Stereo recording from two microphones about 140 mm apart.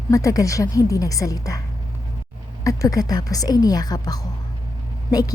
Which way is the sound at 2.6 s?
25° left (ahead or behind).